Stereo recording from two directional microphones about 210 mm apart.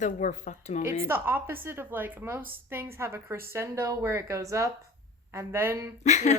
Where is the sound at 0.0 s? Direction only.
35° left (ahead or behind).